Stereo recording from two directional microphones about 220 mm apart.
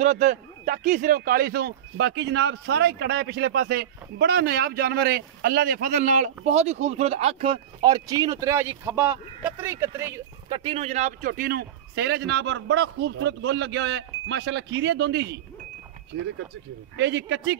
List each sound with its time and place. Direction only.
0.0 s speech: 35° right (ahead or behind); by 10.6 s 10° right (ahead or behind)
10.6 s a man's voice: 30° right (ahead or behind); by 15.4 s 50° right (ahead or behind)
16.9 s a man's voice: 55° right (ahead or behind)